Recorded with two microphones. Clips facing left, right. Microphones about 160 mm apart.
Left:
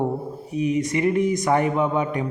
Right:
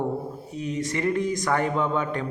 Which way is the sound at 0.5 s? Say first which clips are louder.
Left 7 dB; 20° left (ahead or behind).